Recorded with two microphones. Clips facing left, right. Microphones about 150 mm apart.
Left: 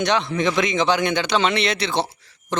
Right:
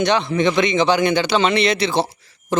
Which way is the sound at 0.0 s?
Centre (ahead or behind).